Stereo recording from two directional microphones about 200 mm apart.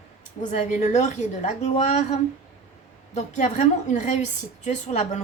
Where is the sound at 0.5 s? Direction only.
35° left (ahead or behind).